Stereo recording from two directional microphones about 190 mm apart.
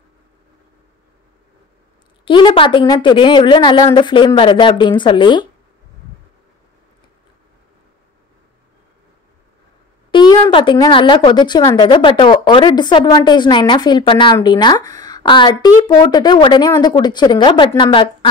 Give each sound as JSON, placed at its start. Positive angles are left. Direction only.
{"t": 2.2, "sound": "a woman's voice", "side_deg": 25}
{"t": 10.1, "sound": "a woman's voice", "side_deg": 20}